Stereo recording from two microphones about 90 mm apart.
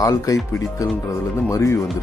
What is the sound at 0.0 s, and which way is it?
Speech, 40° left (ahead or behind).